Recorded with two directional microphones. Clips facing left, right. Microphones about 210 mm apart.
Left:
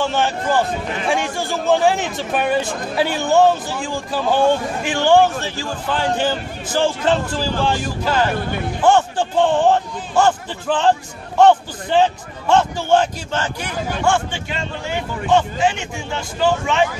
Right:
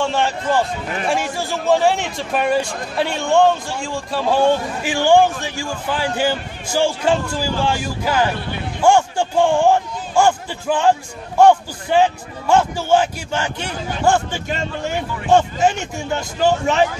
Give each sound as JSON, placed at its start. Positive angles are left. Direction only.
{"t": 0.0, "sound": "a man's voice", "side_deg": 0}
{"t": 13.6, "sound": "speech", "side_deg": -35}